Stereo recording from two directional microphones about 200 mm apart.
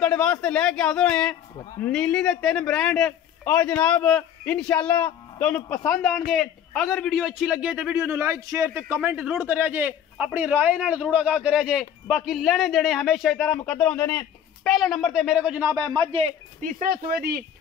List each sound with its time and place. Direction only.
0.0 s a man's voice: 5° left (ahead or behind); by 16.3 s 25° right (ahead or behind)
16.6 s speech: 45° right (ahead or behind)